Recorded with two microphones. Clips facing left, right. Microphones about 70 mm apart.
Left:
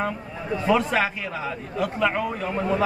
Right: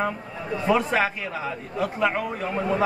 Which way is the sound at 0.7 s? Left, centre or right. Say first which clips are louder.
Left 1 dB; centre.